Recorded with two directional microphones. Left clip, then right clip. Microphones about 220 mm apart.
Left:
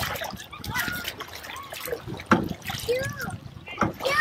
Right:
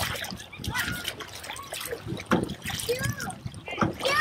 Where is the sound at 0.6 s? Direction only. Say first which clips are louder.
Left 1 dB; 20° left (ahead or behind).